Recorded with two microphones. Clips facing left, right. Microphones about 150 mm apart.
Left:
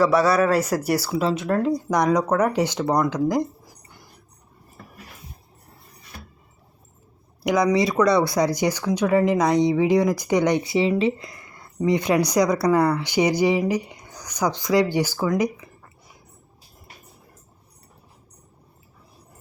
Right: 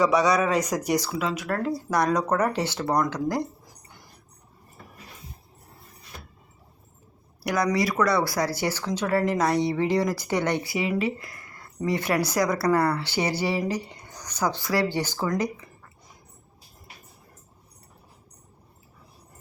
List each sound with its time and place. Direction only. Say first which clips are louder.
0.0 s speech: left 3 dB; centre (ahead or behind)
1.2 s speech: left 6 dB; 25° left (ahead or behind)
7.4 s speech: left 5 dB; 20° left (ahead or behind)